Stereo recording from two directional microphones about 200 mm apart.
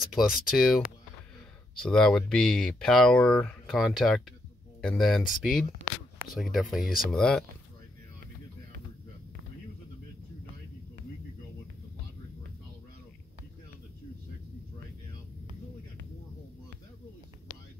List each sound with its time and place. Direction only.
0.0 s speech: centre (ahead or behind)
6.8 s speech: 45° left (ahead or behind)
7.1 s speech: 5° left (ahead or behind)